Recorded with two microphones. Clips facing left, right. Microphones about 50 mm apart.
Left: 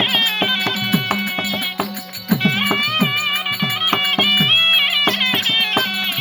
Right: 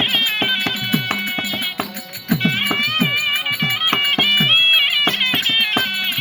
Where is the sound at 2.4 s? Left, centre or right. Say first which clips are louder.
Left 1 dB; right.